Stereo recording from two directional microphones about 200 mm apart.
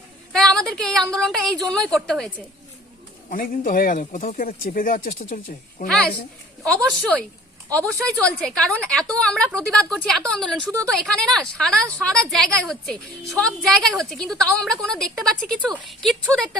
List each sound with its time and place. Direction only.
0.3 s a sound: 5° left (ahead or behind)
1.1 s a woman's voice: 5° left (ahead or behind)
3.2 s speech: 45° left (ahead or behind)
5.9 s a woman's voice: 5° left (ahead or behind)
7.7 s a woman's voice: 5° left (ahead or behind)